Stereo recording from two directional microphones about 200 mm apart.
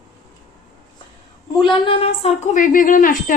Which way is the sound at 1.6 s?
25° left (ahead or behind).